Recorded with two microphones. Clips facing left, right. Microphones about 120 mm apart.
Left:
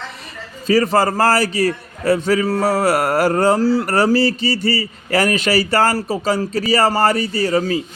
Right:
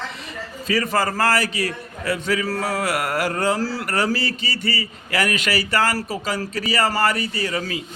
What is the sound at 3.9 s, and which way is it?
Speech, 35° left (ahead or behind).